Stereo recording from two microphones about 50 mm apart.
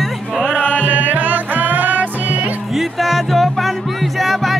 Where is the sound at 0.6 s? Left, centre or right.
Left.